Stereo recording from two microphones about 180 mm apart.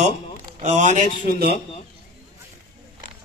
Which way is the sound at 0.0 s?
40° right (ahead or behind).